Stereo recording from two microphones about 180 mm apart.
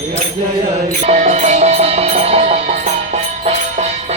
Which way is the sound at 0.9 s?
40° right (ahead or behind).